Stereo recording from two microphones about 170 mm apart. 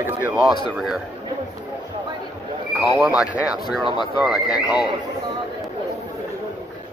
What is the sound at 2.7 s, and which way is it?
Speech, centre (ahead or behind).